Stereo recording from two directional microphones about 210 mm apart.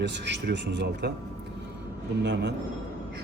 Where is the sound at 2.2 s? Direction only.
55° right (ahead or behind).